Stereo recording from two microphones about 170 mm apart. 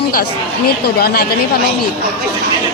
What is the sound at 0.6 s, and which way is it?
Speech, 65° left (ahead or behind).